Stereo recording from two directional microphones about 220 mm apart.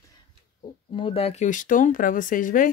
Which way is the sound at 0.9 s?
25° left (ahead or behind).